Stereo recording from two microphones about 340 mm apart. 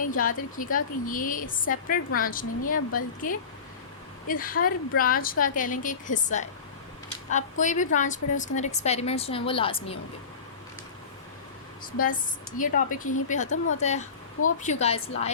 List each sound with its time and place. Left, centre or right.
0.0 s speech: left
7.6 s a woman's voice: left
12.5 s speech: left